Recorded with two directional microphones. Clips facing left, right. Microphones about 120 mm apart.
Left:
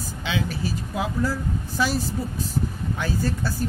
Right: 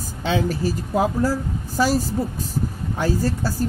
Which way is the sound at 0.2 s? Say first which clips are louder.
Right 6 dB; 40° right (ahead or behind).